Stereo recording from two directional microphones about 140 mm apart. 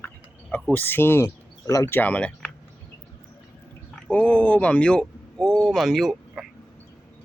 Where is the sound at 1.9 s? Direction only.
10° left (ahead or behind).